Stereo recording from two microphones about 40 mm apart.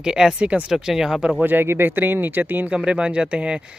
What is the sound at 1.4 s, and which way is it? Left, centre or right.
Speech, right.